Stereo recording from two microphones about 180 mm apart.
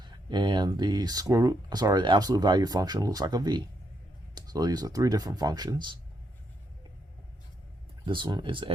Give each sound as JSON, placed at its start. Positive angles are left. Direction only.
{"t": 0.0, "sound": "speech", "side_deg": -25}
{"t": 8.0, "sound": "speech", "side_deg": -25}